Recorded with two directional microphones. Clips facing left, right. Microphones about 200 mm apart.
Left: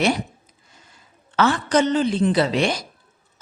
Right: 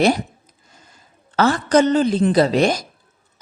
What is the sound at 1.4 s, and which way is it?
A woman's voice, 40° right (ahead or behind).